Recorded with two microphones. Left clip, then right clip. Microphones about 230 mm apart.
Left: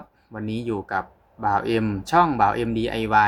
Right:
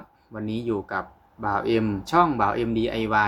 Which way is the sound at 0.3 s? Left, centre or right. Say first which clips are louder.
Even; centre.